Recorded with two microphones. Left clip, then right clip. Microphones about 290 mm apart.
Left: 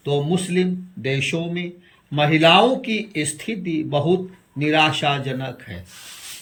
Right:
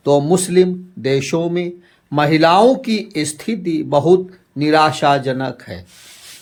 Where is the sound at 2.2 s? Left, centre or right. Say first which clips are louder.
Right 3 dB; centre.